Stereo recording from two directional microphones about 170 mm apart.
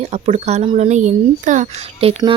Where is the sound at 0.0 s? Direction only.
40° right (ahead or behind).